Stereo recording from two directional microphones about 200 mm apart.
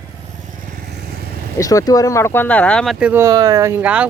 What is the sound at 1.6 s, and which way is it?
Speech, 15° left (ahead or behind).